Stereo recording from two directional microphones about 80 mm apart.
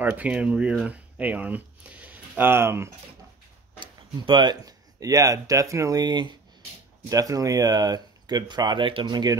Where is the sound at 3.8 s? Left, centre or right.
Right.